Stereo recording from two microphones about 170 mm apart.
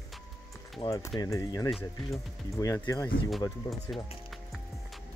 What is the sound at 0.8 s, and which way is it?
Speech, 20° left (ahead or behind).